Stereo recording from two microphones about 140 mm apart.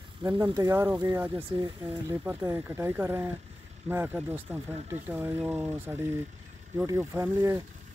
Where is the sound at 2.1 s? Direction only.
15° right (ahead or behind).